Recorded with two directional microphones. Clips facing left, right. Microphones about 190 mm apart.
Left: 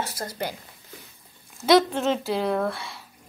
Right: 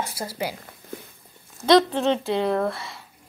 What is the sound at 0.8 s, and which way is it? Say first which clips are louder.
Walk: right 12 dB; 50° right (ahead or behind).